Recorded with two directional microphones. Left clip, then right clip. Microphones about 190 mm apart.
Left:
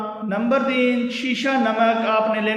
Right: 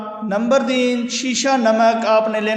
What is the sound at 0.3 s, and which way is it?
A man's voice, 40° right (ahead or behind).